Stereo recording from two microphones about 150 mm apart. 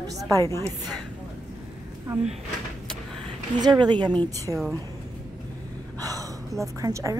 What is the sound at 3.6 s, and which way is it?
A woman's voice, 30° right (ahead or behind).